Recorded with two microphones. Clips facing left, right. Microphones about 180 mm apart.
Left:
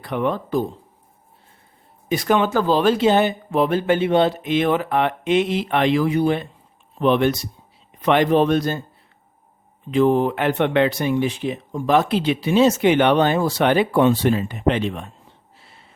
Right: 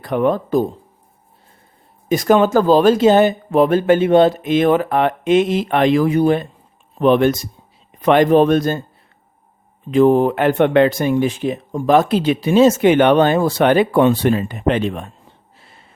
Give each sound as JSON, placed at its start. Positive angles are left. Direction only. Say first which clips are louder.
{"t": 0.0, "sound": "speech", "louder": "right 6 dB", "side_deg": -45}
{"t": 2.0, "sound": "speech", "louder": "right 5 dB", "side_deg": -45}
{"t": 9.9, "sound": "speech", "louder": "right 4 dB", "side_deg": -45}
{"t": 15.5, "sound": "a sound", "louder": "right 2 dB", "side_deg": -50}